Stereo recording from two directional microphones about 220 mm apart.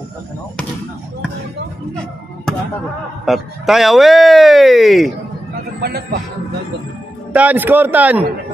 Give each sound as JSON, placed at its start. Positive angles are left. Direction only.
{"t": 3.3, "sound": "speech", "side_deg": 0}
{"t": 5.8, "sound": "speech", "side_deg": -45}
{"t": 7.3, "sound": "a man's voice", "side_deg": -10}